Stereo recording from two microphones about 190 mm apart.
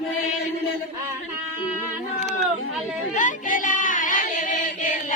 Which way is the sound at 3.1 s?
45° left (ahead or behind).